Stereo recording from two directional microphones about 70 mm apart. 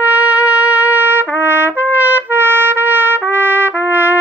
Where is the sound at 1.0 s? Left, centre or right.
Right.